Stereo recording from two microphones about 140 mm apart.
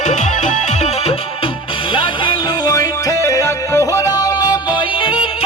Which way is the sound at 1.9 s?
35° left (ahead or behind).